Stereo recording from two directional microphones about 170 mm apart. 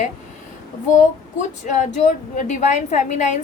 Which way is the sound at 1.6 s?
50° left (ahead or behind).